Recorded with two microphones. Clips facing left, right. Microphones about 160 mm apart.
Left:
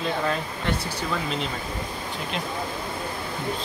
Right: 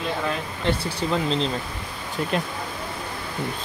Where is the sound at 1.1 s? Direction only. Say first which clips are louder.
Right 5 dB; 30° right (ahead or behind).